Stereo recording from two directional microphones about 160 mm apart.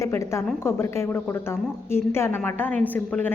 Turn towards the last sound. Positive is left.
turn(degrees=10)  # may be behind; listen again after turning